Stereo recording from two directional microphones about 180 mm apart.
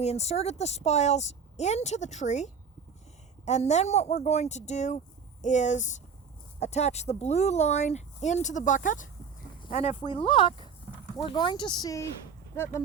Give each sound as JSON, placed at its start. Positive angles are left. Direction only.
{"t": 0.0, "sound": "a woman's voice", "side_deg": 35}